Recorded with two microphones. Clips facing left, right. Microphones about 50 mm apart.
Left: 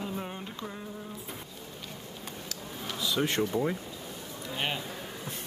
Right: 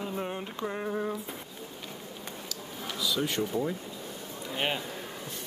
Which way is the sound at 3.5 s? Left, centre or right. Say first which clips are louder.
Even; centre.